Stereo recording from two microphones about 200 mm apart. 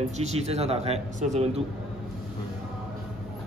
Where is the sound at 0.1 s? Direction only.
35° right (ahead or behind).